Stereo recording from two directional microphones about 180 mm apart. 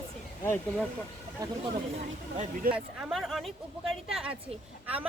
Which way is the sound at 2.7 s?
5° right (ahead or behind).